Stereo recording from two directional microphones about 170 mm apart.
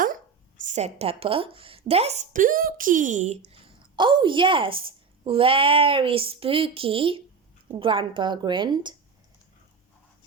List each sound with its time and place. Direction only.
0.0 s a woman's voice: 50° right (ahead or behind); by 9.0 s 25° right (ahead or behind)